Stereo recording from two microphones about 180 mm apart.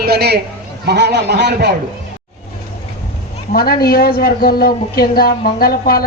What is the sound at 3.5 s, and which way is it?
A woman's voice, 60° left (ahead or behind).